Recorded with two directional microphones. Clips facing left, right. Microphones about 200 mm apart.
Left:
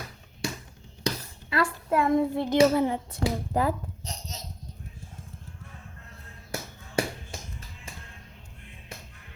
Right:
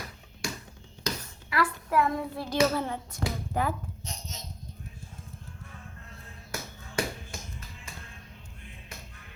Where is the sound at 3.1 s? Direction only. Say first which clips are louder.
Left 4 dB; 35° left (ahead or behind).